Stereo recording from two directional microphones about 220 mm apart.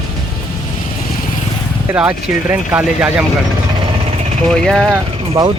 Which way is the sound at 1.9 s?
5° right (ahead or behind).